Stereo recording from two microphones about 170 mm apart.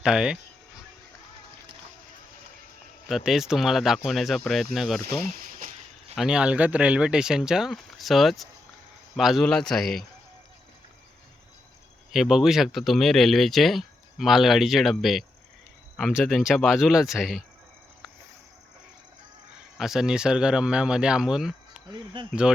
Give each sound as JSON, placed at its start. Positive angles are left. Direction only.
{"t": 0.0, "sound": "speech", "side_deg": -5}
{"t": 3.1, "sound": "speech", "side_deg": 0}
{"t": 6.1, "sound": "speech", "side_deg": -5}
{"t": 12.1, "sound": "speech", "side_deg": 0}
{"t": 19.8, "sound": "speech", "side_deg": 0}
{"t": 21.8, "sound": "speech", "side_deg": -30}
{"t": 22.3, "sound": "speech", "side_deg": -5}